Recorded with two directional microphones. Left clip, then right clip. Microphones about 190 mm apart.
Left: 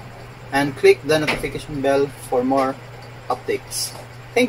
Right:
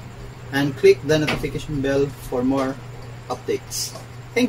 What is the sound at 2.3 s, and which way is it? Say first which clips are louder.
Speech: left 6 dB; 10° right (ahead or behind).